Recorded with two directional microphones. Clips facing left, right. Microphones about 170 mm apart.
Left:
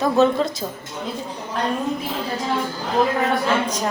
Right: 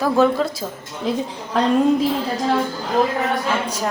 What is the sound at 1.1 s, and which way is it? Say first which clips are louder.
Speech: right 8 dB; 90° right.